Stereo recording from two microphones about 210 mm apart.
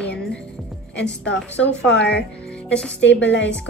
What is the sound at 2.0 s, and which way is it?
Speech, 5° left (ahead or behind).